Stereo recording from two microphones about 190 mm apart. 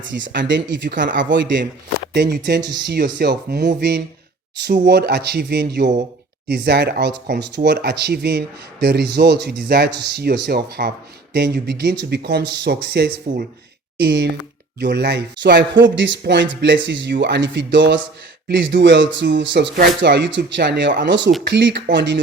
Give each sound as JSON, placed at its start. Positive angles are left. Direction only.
{"t": 0.0, "sound": "speech", "side_deg": -75}
{"t": 2.1, "sound": "speech", "side_deg": -60}